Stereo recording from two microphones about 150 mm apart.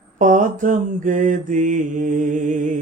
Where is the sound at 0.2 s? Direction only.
65° right (ahead or behind).